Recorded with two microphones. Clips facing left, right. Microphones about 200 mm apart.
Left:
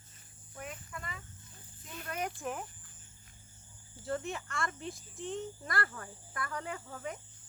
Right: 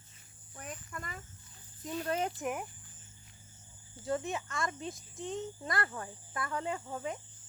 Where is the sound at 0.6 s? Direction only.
40° right (ahead or behind).